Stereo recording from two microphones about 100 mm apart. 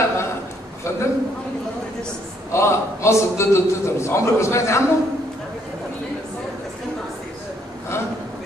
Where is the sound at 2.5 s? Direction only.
30° left (ahead or behind).